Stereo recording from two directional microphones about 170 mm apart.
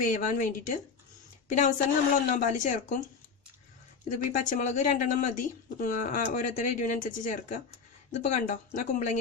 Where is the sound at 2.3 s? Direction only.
50° left (ahead or behind).